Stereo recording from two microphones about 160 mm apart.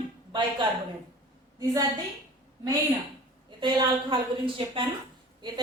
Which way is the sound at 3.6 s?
30° right (ahead or behind).